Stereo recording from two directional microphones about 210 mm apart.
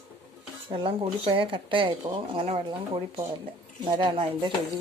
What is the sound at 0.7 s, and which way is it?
Speech, 25° right (ahead or behind).